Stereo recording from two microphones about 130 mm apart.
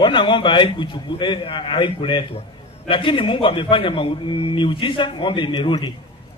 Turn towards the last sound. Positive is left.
turn(degrees=35)  # may be behind; listen again after turning